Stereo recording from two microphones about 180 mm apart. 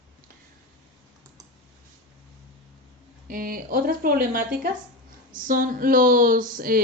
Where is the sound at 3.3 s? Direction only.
50° right (ahead or behind).